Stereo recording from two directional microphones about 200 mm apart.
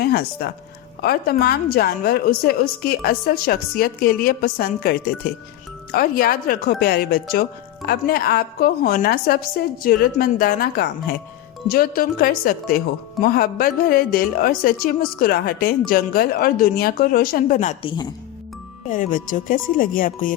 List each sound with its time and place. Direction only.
0.0 s a woman's voice: 50° left (ahead or behind)
17.8 s speech: 20° left (ahead or behind)
18.9 s a woman's voice: 40° left (ahead or behind)